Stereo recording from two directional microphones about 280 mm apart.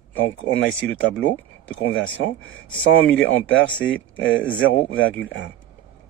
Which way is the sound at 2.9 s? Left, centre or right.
Left.